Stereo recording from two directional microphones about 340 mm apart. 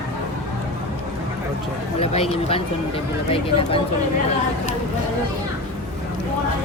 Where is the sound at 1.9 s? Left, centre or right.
Centre.